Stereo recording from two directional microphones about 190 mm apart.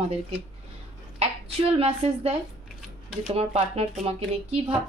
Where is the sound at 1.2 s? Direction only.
30° right (ahead or behind).